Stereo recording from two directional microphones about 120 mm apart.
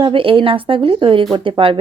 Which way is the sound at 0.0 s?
45° right (ahead or behind).